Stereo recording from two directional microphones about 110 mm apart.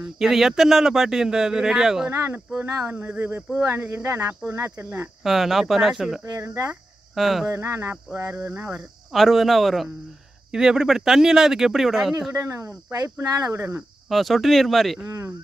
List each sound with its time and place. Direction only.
0.0 s speech: 5° right (ahead or behind)
2.0 s speech: 25° right (ahead or behind)
5.2 s speech: centre (ahead or behind)
6.2 s speech: 30° right (ahead or behind)
7.2 s speech: centre (ahead or behind)
7.4 s speech: 25° right (ahead or behind)
9.1 s speech: centre (ahead or behind)
12.4 s speech: 25° right (ahead or behind)
14.0 s speech: centre (ahead or behind)
15.0 s speech: 25° right (ahead or behind)